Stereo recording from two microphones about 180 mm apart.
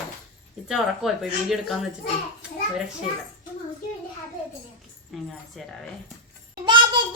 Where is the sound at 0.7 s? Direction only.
Centre (ahead or behind).